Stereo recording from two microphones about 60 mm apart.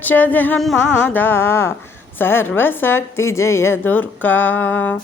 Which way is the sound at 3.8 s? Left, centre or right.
Left.